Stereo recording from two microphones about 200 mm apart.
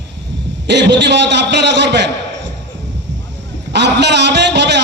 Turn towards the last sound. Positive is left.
turn(degrees=-60)  # may be behind; listen again after turning